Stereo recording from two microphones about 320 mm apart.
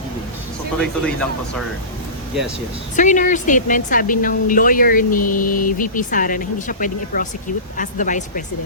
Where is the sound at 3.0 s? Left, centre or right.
Left.